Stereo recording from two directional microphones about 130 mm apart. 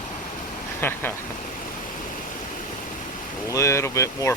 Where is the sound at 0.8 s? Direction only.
15° left (ahead or behind).